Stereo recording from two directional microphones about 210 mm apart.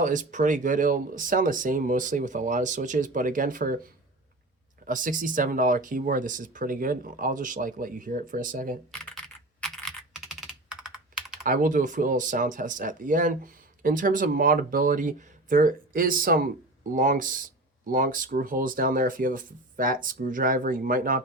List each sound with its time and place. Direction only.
0.0 s speech: 35° right (ahead or behind)
4.9 s speech: 40° right (ahead or behind)
8.9 s computer keyboard: 5° left (ahead or behind)
11.4 s speech: 40° right (ahead or behind)